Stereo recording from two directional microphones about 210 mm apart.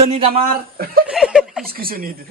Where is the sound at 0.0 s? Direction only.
30° right (ahead or behind).